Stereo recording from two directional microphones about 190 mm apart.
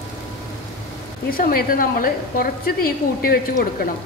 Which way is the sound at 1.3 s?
50° left (ahead or behind).